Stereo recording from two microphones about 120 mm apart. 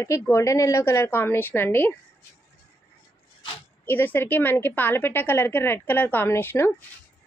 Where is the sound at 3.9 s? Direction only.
15° left (ahead or behind).